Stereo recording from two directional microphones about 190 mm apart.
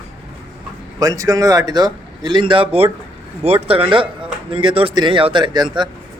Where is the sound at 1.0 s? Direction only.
20° right (ahead or behind).